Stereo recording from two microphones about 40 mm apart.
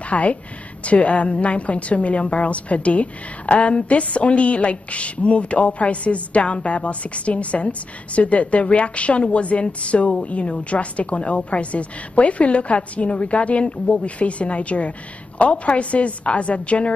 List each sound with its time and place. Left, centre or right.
0.0 s a woman's voice: left